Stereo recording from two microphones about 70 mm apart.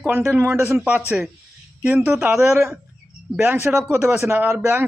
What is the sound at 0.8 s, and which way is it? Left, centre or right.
Speech, centre.